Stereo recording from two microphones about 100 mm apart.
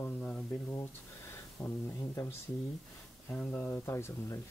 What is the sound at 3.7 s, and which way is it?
Speech, 25° left (ahead or behind).